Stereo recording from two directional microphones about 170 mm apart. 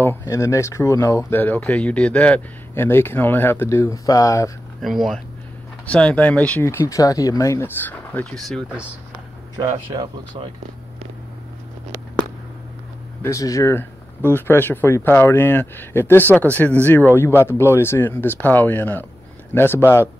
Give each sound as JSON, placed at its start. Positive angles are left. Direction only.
{"t": 0.0, "sound": "speech", "side_deg": 15}
{"t": 4.8, "sound": "speech", "side_deg": 0}
{"t": 9.6, "sound": "speech", "side_deg": -25}
{"t": 13.2, "sound": "speech", "side_deg": 20}